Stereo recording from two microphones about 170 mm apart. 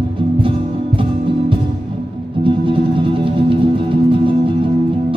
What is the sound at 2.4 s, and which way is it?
Music, 30° right (ahead or behind).